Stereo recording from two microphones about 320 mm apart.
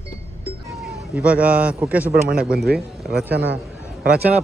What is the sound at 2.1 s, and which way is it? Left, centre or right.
Speech, right.